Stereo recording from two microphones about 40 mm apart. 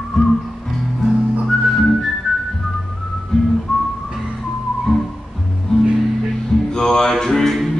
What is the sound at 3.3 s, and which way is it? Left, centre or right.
Music, centre.